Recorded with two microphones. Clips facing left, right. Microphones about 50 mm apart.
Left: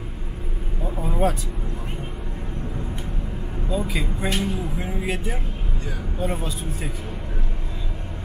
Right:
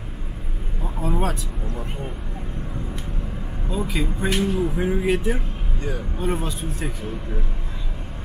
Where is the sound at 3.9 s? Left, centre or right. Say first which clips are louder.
Right 2 dB; centre.